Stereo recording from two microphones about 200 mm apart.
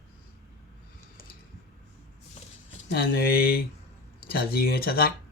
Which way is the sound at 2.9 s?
50° left (ahead or behind).